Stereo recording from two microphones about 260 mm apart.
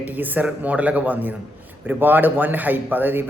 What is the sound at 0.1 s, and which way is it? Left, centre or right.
A man's voice, centre.